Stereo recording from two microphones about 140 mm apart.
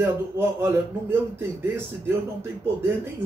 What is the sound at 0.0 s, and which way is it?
Speech, 15° right (ahead or behind).